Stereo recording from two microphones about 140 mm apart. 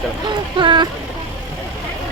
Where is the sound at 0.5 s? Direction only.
35° right (ahead or behind).